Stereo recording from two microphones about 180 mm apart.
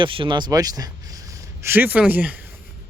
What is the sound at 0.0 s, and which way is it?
Speech, 30° right (ahead or behind).